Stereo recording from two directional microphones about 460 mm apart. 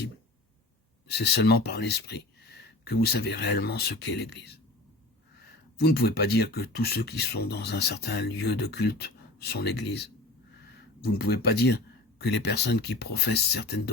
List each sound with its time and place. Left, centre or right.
1.0 s speech: left